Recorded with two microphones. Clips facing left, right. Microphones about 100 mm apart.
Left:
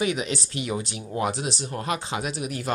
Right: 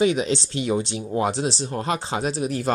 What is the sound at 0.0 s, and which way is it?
Speech, 25° right (ahead or behind).